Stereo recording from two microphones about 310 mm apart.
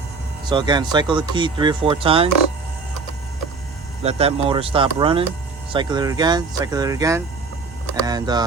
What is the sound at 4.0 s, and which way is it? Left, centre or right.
Speech, centre.